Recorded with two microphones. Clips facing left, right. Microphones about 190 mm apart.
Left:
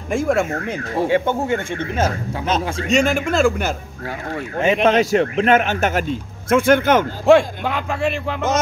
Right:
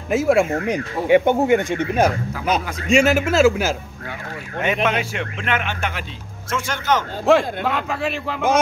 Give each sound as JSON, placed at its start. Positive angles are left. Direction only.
{"t": 0.1, "sound": "speech", "side_deg": -5}
{"t": 4.8, "sound": "a man's voice", "side_deg": 35}
{"t": 7.2, "sound": "speech", "side_deg": 0}